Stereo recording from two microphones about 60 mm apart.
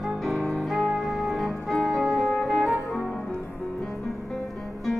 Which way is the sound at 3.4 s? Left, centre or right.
Left.